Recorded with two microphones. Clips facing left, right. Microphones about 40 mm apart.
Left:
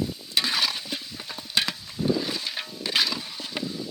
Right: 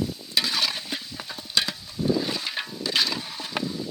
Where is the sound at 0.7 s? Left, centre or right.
Centre.